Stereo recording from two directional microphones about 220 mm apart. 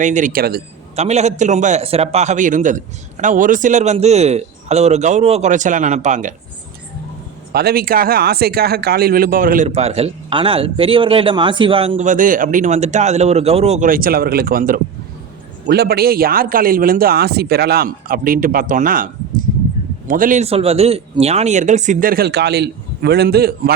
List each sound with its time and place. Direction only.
0.0 s a man's voice: 35° right (ahead or behind)
0.9 s a man's voice: 30° right (ahead or behind)
7.5 s speech: 45° right (ahead or behind)
9.6 s a man's voice: 30° right (ahead or behind); by 23.7 s 45° right (ahead or behind)